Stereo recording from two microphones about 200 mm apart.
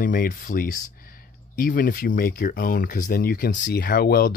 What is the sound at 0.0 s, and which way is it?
Speech, 45° left (ahead or behind).